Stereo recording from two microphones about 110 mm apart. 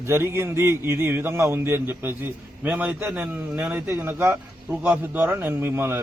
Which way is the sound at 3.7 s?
20° right (ahead or behind).